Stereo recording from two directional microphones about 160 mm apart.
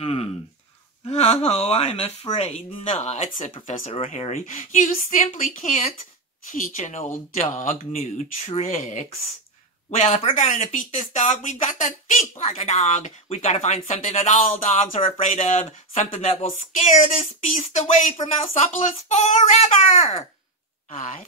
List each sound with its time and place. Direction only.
0.0 s a sound: 40° left (ahead or behind)
1.1 s speech: 40° left (ahead or behind)
18.1 s speech: 40° left (ahead or behind)